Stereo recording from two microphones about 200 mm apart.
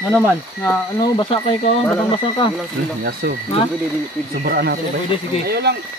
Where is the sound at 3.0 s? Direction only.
50° right (ahead or behind).